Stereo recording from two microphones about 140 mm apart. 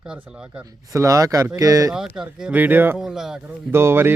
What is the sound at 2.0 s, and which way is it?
Speech, 5° right (ahead or behind).